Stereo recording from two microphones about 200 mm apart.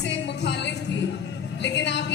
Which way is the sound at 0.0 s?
60° left (ahead or behind).